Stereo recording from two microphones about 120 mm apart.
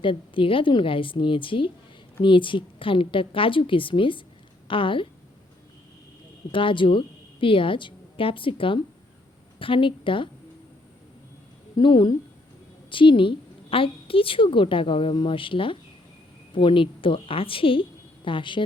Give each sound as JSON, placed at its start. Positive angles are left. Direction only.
{"t": 0.0, "sound": "a woman's voice", "side_deg": 45}
{"t": 6.5, "sound": "a woman's voice", "side_deg": 45}
{"t": 11.8, "sound": "a woman's voice", "side_deg": 40}